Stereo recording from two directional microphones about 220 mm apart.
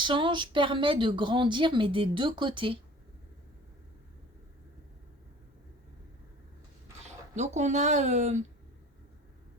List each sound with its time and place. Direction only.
0.0 s speech: 20° right (ahead or behind)
7.0 s speech: 30° right (ahead or behind)